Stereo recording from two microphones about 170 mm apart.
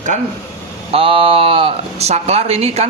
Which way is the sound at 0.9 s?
30° right (ahead or behind).